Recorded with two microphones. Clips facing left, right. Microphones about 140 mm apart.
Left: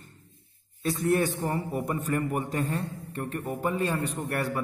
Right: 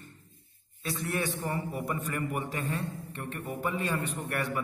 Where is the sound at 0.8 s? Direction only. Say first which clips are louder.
Left 8 dB; 40° left (ahead or behind).